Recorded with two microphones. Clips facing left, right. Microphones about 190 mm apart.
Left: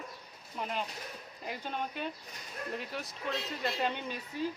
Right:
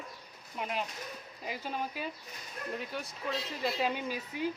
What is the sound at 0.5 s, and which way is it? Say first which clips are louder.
Speech: right 1 dB; centre (ahead or behind).